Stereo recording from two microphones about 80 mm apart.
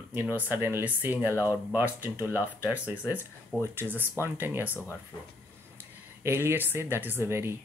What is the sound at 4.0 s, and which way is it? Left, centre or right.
Speech, right.